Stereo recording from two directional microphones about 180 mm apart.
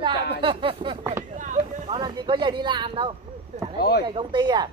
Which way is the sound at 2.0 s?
25° right (ahead or behind).